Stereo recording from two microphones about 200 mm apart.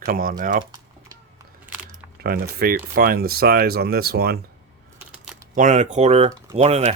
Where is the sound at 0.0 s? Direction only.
45° right (ahead or behind).